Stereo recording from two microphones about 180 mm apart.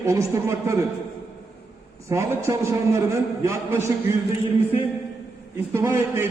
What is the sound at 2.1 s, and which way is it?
A man's voice, 15° right (ahead or behind).